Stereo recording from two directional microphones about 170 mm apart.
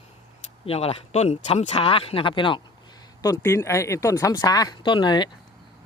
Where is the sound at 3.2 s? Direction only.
20° left (ahead or behind).